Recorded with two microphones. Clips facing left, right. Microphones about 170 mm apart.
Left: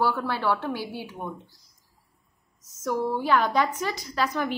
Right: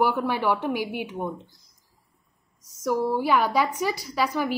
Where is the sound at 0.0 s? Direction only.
15° right (ahead or behind).